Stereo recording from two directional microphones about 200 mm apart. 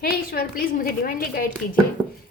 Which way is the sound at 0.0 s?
45° left (ahead or behind).